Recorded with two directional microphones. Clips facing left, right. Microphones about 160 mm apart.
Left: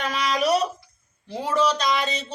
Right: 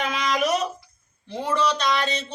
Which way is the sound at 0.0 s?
35° left (ahead or behind).